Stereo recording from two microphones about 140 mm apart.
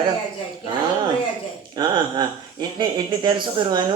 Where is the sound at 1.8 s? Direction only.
30° right (ahead or behind).